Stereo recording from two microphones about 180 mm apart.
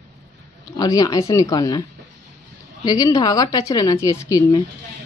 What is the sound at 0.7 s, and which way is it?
A woman's voice, 20° left (ahead or behind).